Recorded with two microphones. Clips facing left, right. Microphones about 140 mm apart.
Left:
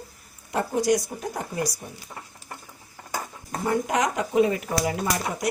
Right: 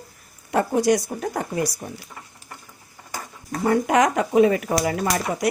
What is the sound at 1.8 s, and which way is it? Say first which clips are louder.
Speech: right 6 dB; 50° right (ahead or behind).